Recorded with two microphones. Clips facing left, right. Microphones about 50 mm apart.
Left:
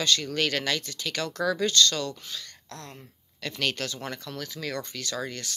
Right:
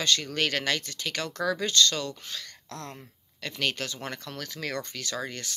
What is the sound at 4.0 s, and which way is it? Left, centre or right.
Speech, right.